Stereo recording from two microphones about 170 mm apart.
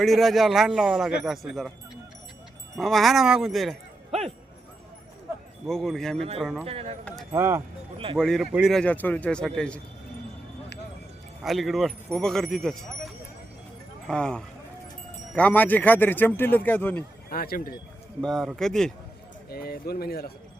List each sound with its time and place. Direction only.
0.0 s speech: centre (ahead or behind)
2.7 s speech: centre (ahead or behind)
5.6 s speech: centre (ahead or behind)
6.1 s speech: 35° right (ahead or behind)
6.4 s speech: centre (ahead or behind)
6.7 s speech: 35° right (ahead or behind)
7.3 s speech: 15° right (ahead or behind)
7.9 s speech: 30° right (ahead or behind)
8.2 s speech: centre (ahead or behind)
11.4 s speech: centre (ahead or behind)
17.2 s speech: 60° left (ahead or behind)
18.2 s speech: centre (ahead or behind)
19.5 s speech: 65° left (ahead or behind)